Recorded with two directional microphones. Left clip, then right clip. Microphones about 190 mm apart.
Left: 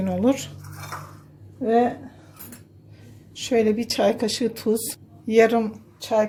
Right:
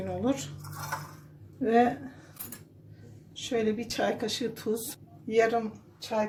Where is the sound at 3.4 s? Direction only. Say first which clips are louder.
Left 9 dB; 40° left (ahead or behind).